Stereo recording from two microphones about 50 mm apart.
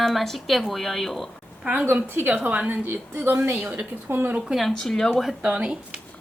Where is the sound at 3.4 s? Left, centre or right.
Right.